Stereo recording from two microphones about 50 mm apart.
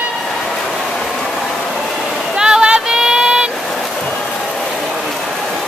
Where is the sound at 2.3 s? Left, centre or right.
Centre.